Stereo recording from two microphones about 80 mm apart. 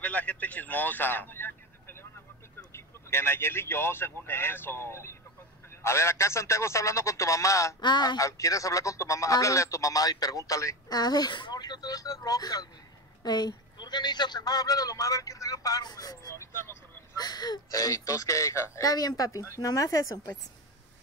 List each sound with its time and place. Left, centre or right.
0.0 s speech: centre; by 7.7 s left
7.8 s a sound: left
8.2 s speech: left